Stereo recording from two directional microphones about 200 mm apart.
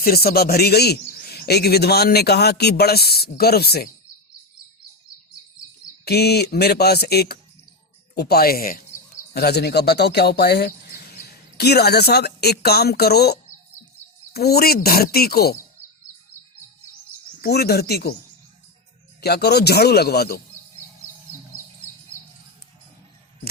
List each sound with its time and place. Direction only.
0.0 s a man's voice: 50° left (ahead or behind)
6.1 s a man's voice: 55° left (ahead or behind)
17.4 s a man's voice: 50° left (ahead or behind)
19.2 s a man's voice: 55° left (ahead or behind)